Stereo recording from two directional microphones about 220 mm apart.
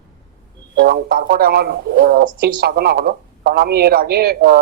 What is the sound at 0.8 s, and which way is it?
Speech, 45° right (ahead or behind).